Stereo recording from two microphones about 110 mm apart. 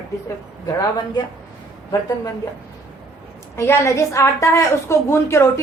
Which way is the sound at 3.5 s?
25° left (ahead or behind).